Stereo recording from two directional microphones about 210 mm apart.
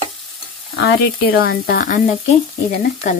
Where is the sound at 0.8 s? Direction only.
45° left (ahead or behind).